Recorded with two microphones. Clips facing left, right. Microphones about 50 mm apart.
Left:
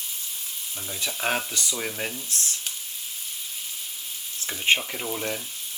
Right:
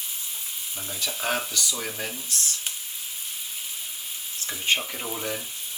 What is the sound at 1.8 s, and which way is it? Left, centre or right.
Speech, centre.